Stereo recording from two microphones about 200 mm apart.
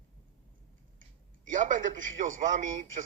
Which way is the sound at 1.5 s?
40° right (ahead or behind).